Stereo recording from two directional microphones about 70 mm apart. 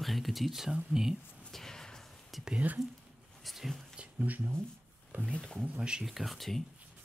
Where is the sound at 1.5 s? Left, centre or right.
Centre.